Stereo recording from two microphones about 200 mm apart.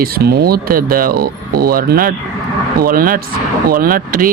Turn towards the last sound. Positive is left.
turn(degrees=-45)  # may be behind; listen again after turning